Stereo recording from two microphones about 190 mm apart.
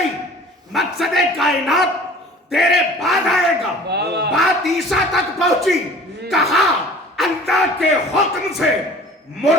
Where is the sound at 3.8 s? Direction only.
60° right (ahead or behind).